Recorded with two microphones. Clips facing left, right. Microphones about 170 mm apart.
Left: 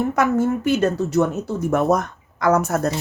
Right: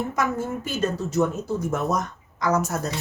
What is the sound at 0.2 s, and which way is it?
A woman's voice, 70° left (ahead or behind).